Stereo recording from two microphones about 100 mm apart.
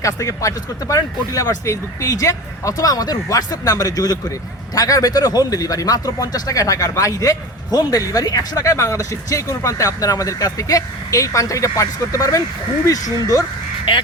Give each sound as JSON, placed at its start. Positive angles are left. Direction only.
{"t": 0.0, "sound": "speech", "side_deg": 30}
{"t": 13.9, "sound": "speech", "side_deg": 50}